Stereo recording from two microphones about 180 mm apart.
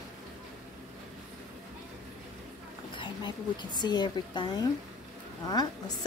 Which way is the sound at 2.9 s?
25° left (ahead or behind).